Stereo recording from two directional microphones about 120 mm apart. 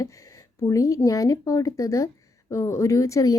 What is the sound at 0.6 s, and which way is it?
Speech, 25° left (ahead or behind).